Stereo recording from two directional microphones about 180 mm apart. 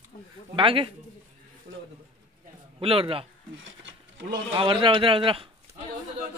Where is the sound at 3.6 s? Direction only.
90° right.